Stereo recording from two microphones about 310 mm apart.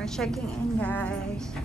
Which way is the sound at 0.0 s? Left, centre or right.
Centre.